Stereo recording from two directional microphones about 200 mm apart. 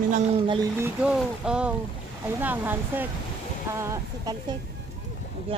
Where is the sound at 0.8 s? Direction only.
5° right (ahead or behind).